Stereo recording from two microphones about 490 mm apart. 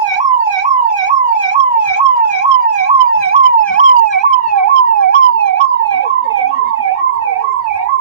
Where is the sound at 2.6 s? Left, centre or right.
Left.